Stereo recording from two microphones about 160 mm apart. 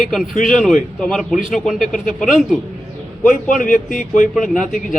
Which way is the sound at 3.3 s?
55° left (ahead or behind).